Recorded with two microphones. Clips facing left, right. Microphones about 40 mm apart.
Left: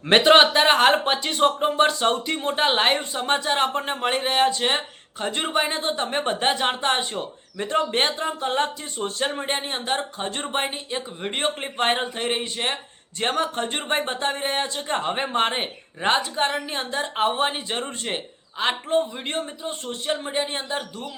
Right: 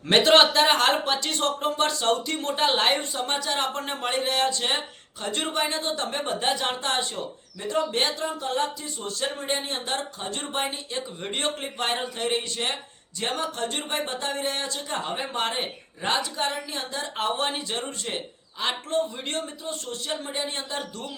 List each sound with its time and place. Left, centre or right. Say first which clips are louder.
0.1 s speech: left 3 dB; centre
13.1 s speech: left 5 dB; left; by 21.1 s centre